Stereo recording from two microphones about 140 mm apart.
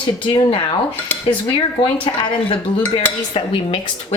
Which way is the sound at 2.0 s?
35° left (ahead or behind).